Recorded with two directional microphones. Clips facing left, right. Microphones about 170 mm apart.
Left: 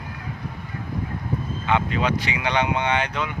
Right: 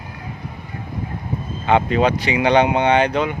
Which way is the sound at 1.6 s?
30° right (ahead or behind).